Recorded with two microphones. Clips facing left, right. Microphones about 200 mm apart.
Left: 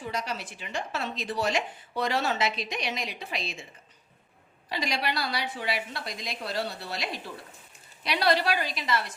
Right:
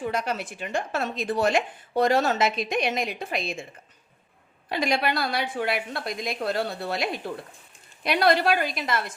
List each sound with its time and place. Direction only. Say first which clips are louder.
0.1 s speech: right 5 dB; 55° right (ahead or behind)
4.7 s speech: right 6 dB; 55° right (ahead or behind)